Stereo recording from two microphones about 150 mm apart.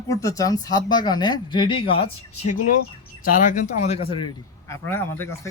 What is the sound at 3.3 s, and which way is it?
Speech, 60° left (ahead or behind).